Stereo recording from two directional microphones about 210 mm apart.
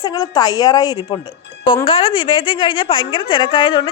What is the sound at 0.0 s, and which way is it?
A woman's voice, 20° left (ahead or behind).